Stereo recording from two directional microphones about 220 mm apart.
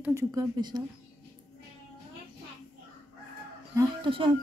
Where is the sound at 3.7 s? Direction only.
20° right (ahead or behind).